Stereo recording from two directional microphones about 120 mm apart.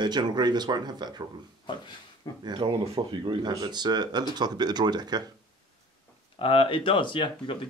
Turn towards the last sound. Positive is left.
turn(degrees=45)  # may be behind; listen again after turning